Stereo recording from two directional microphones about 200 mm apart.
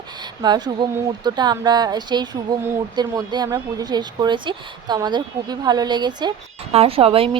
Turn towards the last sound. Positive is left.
turn(degrees=-30)  # may be behind; listen again after turning